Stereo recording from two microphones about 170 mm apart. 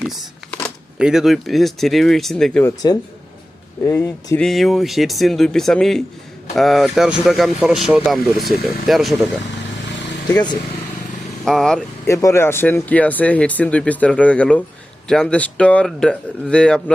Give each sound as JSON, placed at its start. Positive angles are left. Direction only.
{"t": 0.9, "sound": "speech", "side_deg": -5}
{"t": 3.8, "sound": "speech", "side_deg": 15}
{"t": 4.4, "sound": "speech", "side_deg": 0}
{"t": 10.3, "sound": "speech", "side_deg": 25}
{"t": 11.4, "sound": "speech", "side_deg": 5}
{"t": 12.0, "sound": "speech", "side_deg": 15}